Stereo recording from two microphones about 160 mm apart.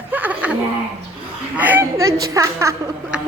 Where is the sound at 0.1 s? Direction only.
10° right (ahead or behind).